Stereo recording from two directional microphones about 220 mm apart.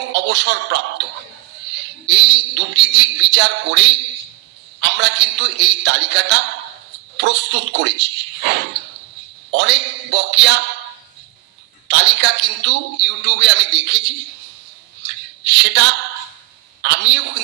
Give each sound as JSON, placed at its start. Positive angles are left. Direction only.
{"t": 0.1, "sound": "speech", "side_deg": -55}
{"t": 2.0, "sound": "a man's voice", "side_deg": -55}
{"t": 9.5, "sound": "a sound", "side_deg": -55}
{"t": 11.9, "sound": "a man's voice", "side_deg": -55}
{"t": 15.0, "sound": "a sound", "side_deg": -55}
{"t": 16.8, "sound": "a man's voice", "side_deg": -55}